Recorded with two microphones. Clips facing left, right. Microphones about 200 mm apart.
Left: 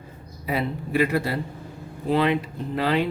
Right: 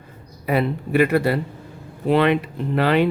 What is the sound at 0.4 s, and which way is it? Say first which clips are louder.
Speech: right 5 dB; 60° right (ahead or behind).